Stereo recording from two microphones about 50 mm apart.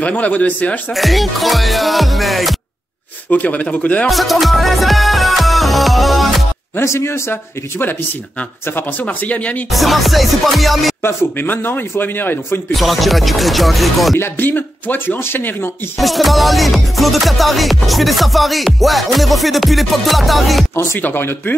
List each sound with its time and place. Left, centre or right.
0.0 s speech: left
0.9 s music: centre
3.3 s speech: left
4.1 s music: centre
6.8 s a man's voice: left
9.0 s speech: left
9.7 s music: centre
11.0 s speech: left
12.7 s music: centre
14.4 s speech: left
16.0 s music: centre
20.7 s a man's voice: left
21.0 s speech: left